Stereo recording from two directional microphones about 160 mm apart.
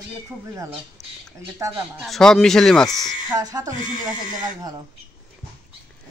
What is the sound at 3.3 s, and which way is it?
Speech, 20° right (ahead or behind).